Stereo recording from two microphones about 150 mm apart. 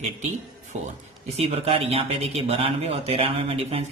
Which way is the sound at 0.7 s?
45° right (ahead or behind).